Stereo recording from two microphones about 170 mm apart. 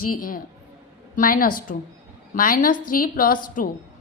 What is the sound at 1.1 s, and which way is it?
A woman's voice, 55° left (ahead or behind).